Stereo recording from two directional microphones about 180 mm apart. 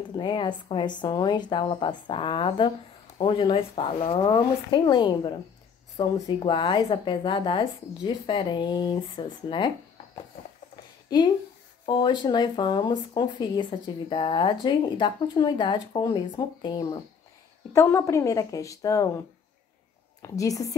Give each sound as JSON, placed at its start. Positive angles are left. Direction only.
{"t": 0.1, "sound": "speech", "side_deg": 25}
{"t": 11.1, "sound": "speech", "side_deg": 25}
{"t": 17.7, "sound": "a woman's voice", "side_deg": 15}
{"t": 20.2, "sound": "speech", "side_deg": 20}